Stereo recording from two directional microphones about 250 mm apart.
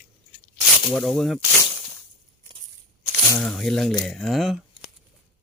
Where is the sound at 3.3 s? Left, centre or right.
Centre.